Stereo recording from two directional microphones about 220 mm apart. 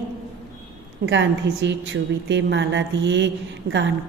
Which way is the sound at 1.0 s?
50° right (ahead or behind).